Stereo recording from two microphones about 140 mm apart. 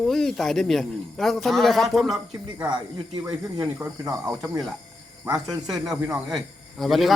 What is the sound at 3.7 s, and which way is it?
Speech, 20° right (ahead or behind).